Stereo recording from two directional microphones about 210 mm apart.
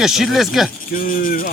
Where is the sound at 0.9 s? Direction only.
40° left (ahead or behind).